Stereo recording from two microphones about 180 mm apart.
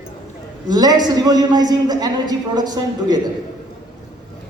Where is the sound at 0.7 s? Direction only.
20° right (ahead or behind).